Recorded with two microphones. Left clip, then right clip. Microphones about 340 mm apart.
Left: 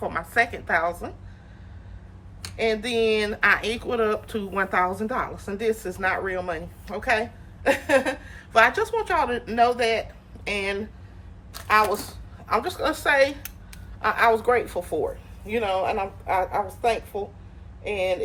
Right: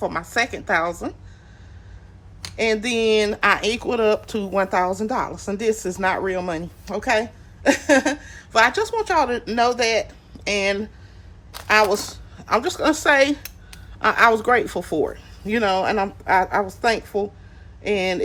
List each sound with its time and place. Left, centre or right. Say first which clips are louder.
0.0 s speech: right 1 dB; centre
2.6 s a woman's voice: right 3 dB; centre